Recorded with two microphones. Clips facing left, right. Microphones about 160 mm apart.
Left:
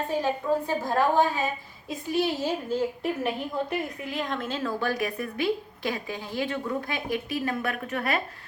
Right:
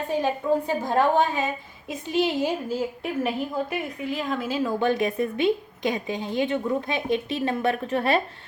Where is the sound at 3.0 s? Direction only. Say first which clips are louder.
Right 2 dB; centre (ahead or behind).